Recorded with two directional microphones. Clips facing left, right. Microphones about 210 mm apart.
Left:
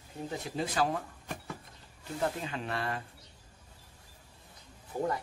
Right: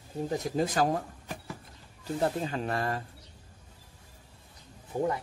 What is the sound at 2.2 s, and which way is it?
Speech, 40° right (ahead or behind).